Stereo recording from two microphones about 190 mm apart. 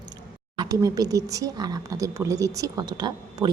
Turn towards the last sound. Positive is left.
turn(degrees=-20)  # may be behind; listen again after turning